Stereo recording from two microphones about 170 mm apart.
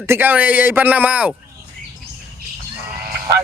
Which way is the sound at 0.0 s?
15° right (ahead or behind).